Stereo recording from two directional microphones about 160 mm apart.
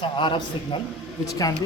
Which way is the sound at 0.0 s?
30° left (ahead or behind).